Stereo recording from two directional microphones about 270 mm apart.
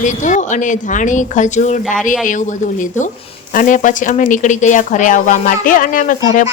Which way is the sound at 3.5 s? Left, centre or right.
Left.